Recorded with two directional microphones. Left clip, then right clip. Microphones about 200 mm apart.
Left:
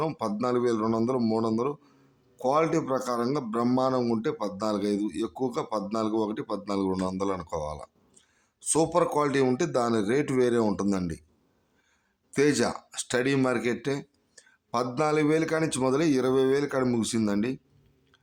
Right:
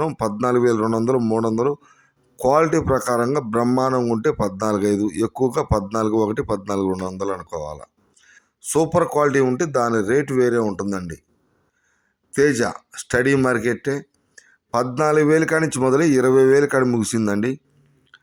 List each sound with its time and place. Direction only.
0.0 s a man's voice: 20° right (ahead or behind)
12.3 s a man's voice: 15° right (ahead or behind)
18.1 s chewing: 25° right (ahead or behind)